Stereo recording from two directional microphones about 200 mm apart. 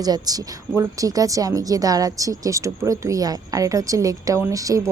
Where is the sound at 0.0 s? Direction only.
20° right (ahead or behind).